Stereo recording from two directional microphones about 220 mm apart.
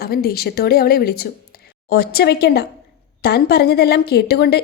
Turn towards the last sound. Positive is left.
turn(degrees=45)  # may be behind; listen again after turning